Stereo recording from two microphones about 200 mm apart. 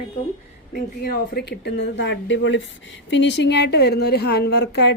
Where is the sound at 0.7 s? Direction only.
50° left (ahead or behind).